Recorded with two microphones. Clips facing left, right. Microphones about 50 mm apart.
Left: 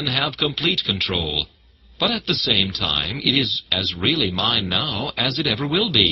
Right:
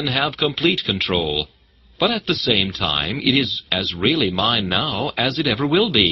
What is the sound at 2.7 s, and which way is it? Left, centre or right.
Speech, centre.